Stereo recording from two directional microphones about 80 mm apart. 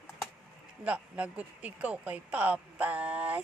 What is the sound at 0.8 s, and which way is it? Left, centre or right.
Speech, centre.